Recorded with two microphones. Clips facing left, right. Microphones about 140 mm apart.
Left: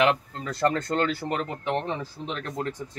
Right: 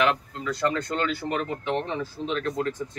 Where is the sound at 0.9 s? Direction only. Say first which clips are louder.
Left 1 dB; 35° left (ahead or behind).